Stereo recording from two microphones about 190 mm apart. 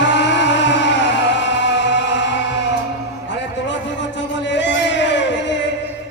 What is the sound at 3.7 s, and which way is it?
Music, 70° left (ahead or behind).